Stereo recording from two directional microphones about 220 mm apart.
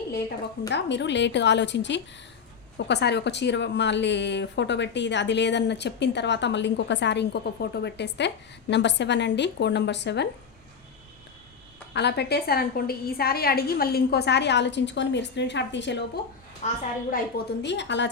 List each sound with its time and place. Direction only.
0.7 s speech: 55° left (ahead or behind)
11.9 s speech: 50° left (ahead or behind)
16.6 s a woman's voice: 30° left (ahead or behind)
17.1 s speech: 50° left (ahead or behind)